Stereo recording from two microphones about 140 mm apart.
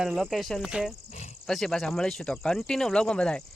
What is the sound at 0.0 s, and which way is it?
Speech, centre (ahead or behind).